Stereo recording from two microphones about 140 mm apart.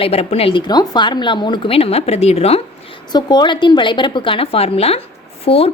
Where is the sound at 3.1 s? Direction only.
30° left (ahead or behind).